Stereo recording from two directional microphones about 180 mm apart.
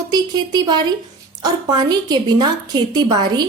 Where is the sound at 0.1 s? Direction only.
20° right (ahead or behind).